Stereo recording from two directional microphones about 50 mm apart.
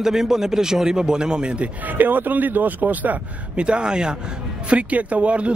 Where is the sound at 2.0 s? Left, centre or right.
Right.